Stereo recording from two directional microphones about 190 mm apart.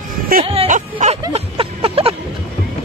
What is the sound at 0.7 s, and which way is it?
Music, 40° right (ahead or behind).